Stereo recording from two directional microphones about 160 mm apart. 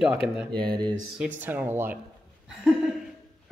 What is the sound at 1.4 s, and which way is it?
Speech, 10° right (ahead or behind).